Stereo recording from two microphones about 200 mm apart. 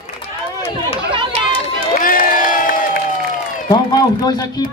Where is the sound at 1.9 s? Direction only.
45° left (ahead or behind).